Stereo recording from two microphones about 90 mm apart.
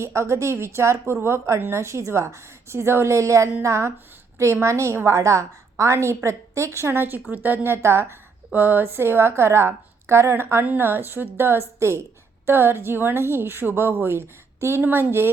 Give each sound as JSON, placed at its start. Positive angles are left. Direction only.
{"t": 0.0, "sound": "a woman's voice", "side_deg": -30}